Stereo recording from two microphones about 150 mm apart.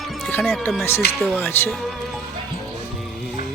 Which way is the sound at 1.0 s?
90° left.